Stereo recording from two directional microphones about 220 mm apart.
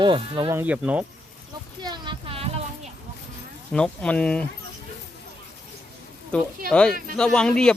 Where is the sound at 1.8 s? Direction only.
20° right (ahead or behind).